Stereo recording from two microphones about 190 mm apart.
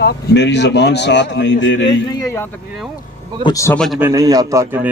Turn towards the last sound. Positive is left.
turn(degrees=-10)  # may be behind; listen again after turning